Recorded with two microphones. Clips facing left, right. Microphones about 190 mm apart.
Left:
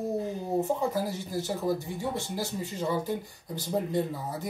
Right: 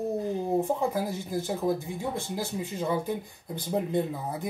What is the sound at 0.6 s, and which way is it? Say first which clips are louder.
Speech: right 1 dB; 15° right (ahead or behind).